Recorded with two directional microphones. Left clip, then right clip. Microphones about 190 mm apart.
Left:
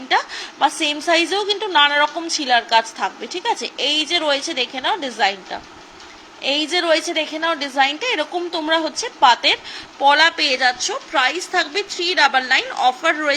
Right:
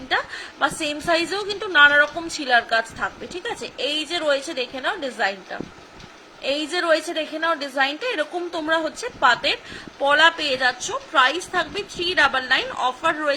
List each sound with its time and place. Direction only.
0.6 s a woman's voice: 15° right (ahead or behind)